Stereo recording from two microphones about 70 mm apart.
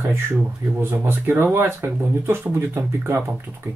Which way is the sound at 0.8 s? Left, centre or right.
Right.